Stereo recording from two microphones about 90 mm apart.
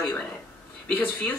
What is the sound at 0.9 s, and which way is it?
Speech, 20° left (ahead or behind).